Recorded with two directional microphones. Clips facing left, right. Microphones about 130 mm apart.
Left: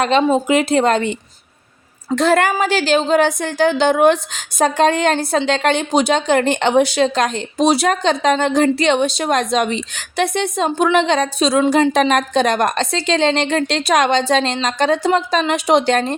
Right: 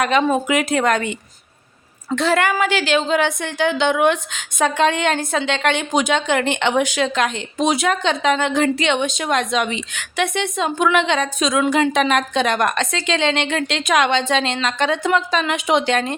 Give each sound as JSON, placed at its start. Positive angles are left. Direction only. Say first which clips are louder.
{"t": 0.0, "sound": "speech", "louder": "left 3 dB", "side_deg": 30}
{"t": 2.1, "sound": "a woman's voice", "louder": "left 3 dB", "side_deg": 45}